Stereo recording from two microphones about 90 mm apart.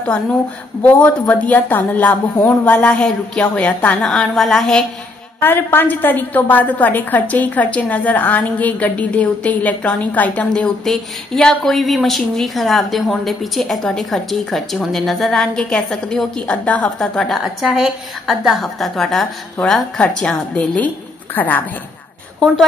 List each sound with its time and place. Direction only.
0.8 s a woman's voice: 15° left (ahead or behind)
4.0 s a woman's voice: 5° left (ahead or behind)
5.4 s a woman's voice: 25° left (ahead or behind)
17.0 s a woman's voice: 5° left (ahead or behind); by 21.6 s 20° left (ahead or behind)